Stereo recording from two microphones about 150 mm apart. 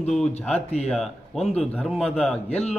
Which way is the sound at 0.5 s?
45° left (ahead or behind).